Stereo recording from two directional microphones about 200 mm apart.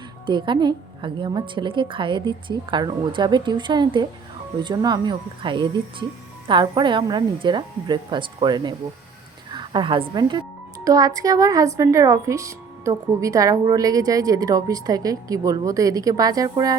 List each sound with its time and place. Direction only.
0.3 s a woman's voice: 25° right (ahead or behind)